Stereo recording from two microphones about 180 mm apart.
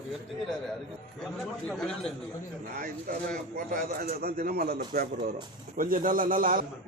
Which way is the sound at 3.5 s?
55° right (ahead or behind).